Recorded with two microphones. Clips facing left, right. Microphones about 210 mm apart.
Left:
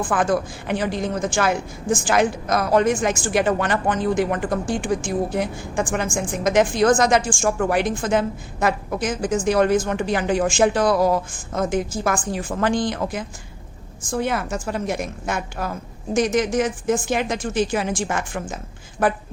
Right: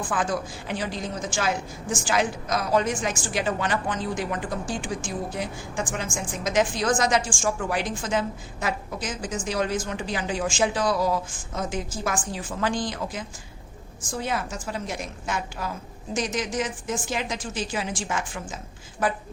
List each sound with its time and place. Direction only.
0.1 s a woman's voice: 60° left (ahead or behind)